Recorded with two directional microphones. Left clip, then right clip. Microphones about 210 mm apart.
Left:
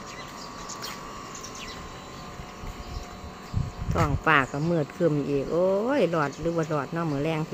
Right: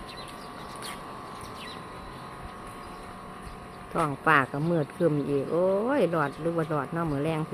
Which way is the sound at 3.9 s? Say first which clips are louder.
Left 1 dB; centre (ahead or behind).